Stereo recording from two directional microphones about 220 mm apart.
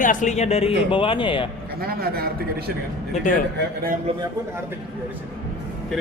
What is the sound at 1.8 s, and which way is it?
Speech, 45° right (ahead or behind).